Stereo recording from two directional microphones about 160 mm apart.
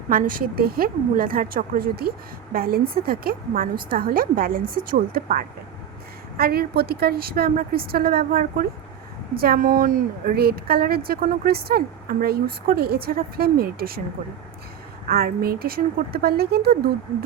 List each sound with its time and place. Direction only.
0.1 s a woman's voice: 60° right (ahead or behind)
15.0 s speech: 70° right (ahead or behind)